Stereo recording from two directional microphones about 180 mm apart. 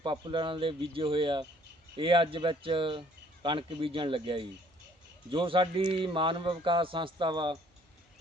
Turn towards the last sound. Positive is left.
turn(degrees=-25)  # may be behind; listen again after turning